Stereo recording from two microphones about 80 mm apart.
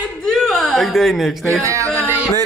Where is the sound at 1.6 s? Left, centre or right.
Right.